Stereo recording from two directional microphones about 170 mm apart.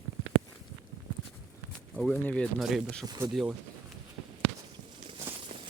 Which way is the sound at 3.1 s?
25° right (ahead or behind).